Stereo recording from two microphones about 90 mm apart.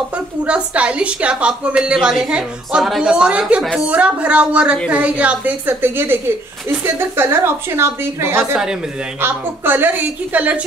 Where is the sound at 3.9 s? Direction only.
15° right (ahead or behind).